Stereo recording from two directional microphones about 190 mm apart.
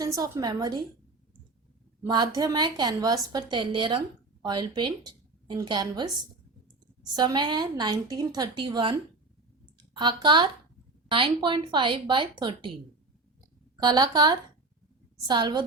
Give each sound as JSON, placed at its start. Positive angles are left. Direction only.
{"t": 0.0, "sound": "a woman's voice", "side_deg": -20}
{"t": 2.0, "sound": "a woman's voice", "side_deg": -20}
{"t": 13.7, "sound": "a woman's voice", "side_deg": -20}